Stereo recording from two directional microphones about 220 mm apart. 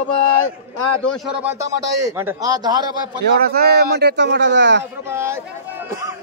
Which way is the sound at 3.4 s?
45° right (ahead or behind).